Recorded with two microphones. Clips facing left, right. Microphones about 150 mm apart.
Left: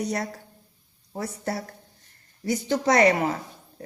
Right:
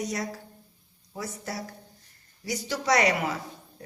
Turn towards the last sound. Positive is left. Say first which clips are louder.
# left 5 dB
turn(degrees=55)  # may be behind; listen again after turning